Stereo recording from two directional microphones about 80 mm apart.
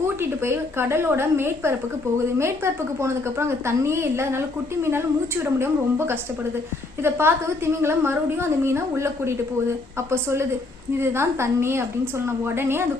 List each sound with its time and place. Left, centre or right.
0.2 s a woman's voice: right
3.0 s a woman's voice: right